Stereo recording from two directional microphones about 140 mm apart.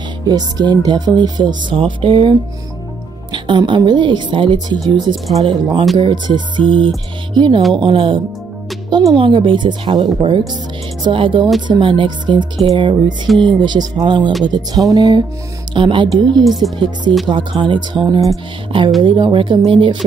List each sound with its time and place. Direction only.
0.3 s speech: 30° right (ahead or behind)
14.9 s music: 25° right (ahead or behind)
15.7 s speech: 35° right (ahead or behind)
16.4 s speech: centre (ahead or behind)
16.7 s speech: 35° right (ahead or behind)